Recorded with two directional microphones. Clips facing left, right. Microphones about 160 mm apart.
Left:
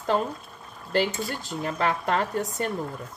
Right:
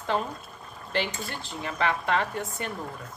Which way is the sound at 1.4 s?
40° left (ahead or behind).